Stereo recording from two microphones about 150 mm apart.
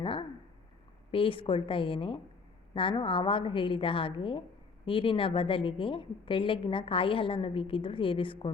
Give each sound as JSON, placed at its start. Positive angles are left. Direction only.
{"t": 0.0, "sound": "a woman's voice", "side_deg": 35}